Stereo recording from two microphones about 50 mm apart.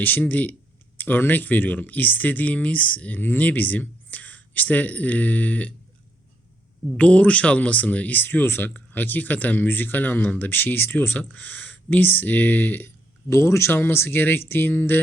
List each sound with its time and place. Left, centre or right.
0.0 s speech: left
7.0 s speech: left
13.3 s speech: left
13.7 s speech: left